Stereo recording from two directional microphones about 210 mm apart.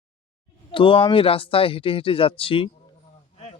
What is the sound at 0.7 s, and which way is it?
Speech, 25° left (ahead or behind).